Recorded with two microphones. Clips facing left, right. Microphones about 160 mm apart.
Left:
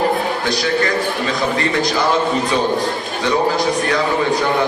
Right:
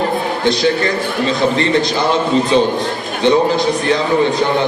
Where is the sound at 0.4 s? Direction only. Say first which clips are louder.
Right 6 dB; 25° right (ahead or behind).